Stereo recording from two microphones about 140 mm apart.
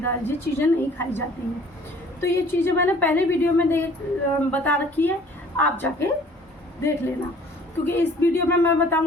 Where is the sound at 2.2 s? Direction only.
15° left (ahead or behind).